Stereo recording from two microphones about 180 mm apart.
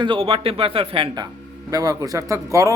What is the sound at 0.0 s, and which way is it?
A man's voice, 30° right (ahead or behind).